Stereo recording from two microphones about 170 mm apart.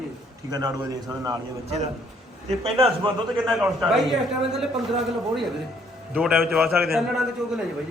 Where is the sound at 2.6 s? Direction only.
35° right (ahead or behind).